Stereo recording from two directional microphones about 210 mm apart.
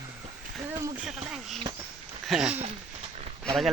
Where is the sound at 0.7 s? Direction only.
15° right (ahead or behind).